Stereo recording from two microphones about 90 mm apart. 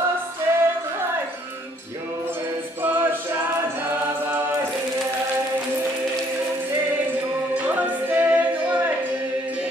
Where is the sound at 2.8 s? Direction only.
25° right (ahead or behind).